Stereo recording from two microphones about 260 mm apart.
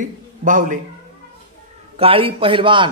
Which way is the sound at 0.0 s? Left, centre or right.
Right.